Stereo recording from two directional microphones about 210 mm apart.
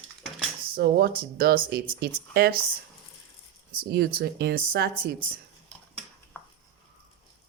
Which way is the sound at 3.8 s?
50° right (ahead or behind).